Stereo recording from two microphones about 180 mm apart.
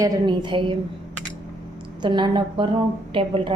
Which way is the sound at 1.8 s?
25° right (ahead or behind).